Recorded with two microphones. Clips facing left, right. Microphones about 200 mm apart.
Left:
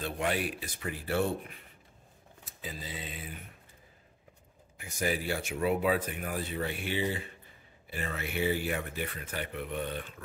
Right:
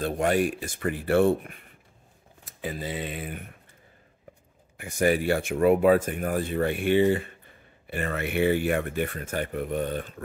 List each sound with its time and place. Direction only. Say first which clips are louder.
0.0 s speech: right 8 dB; 45° right (ahead or behind)
2.6 s speech: right 10 dB; 65° right (ahead or behind)
4.7 s speech: right 9 dB; 55° right (ahead or behind)